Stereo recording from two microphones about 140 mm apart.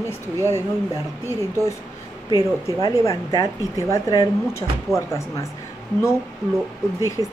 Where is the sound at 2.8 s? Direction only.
25° left (ahead or behind).